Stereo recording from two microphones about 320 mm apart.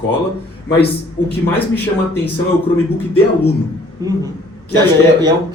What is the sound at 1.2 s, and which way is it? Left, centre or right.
Speech, left.